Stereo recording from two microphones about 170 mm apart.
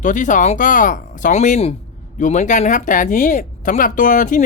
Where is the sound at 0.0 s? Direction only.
45° left (ahead or behind).